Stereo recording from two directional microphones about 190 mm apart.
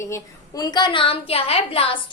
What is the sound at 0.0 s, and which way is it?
A woman's voice, 15° left (ahead or behind).